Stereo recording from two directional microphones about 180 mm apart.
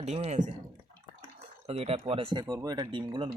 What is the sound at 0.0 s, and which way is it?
Speech, 40° right (ahead or behind).